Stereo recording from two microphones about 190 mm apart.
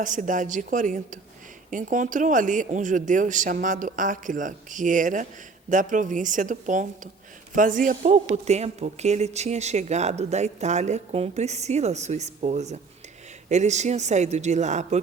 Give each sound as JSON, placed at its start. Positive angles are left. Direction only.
{"t": 0.0, "sound": "a man's voice", "side_deg": -45}